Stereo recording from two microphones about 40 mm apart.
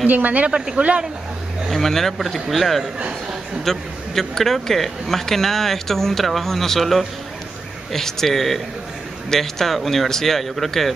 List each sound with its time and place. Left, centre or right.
0.0 s speech: right
0.7 s speech: right
1.7 s a man's voice: centre